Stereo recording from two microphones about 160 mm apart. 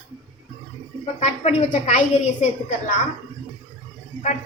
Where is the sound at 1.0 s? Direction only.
45° left (ahead or behind).